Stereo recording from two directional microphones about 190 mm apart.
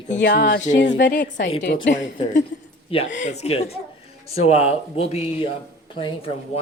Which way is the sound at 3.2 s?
35° left (ahead or behind).